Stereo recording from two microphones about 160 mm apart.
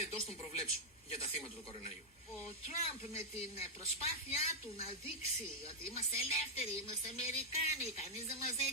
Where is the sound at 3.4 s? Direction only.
40° left (ahead or behind).